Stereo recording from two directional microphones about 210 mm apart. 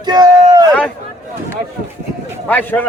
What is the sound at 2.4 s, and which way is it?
Speech, 10° left (ahead or behind).